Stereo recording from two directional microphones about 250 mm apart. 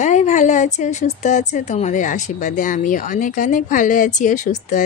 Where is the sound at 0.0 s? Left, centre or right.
Left.